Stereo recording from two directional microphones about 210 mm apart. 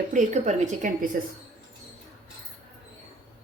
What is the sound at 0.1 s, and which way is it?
Speech, 35° right (ahead or behind).